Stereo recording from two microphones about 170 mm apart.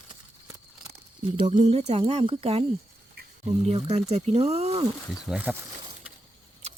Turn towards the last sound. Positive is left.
turn(degrees=-10)  # may be behind; listen again after turning